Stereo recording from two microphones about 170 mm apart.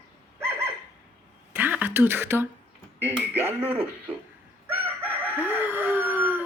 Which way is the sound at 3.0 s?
15° right (ahead or behind).